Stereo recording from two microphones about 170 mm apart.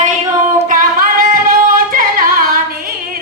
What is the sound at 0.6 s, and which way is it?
Singing, 55° right (ahead or behind).